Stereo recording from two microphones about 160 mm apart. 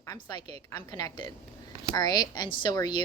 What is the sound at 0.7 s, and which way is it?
A woman's voice, 20° left (ahead or behind).